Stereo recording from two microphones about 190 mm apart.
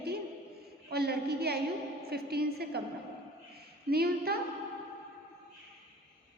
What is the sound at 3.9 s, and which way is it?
Speech, 55° right (ahead or behind).